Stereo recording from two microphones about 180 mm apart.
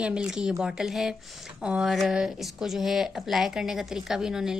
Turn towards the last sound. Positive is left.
turn(degrees=-5)  # may be behind; listen again after turning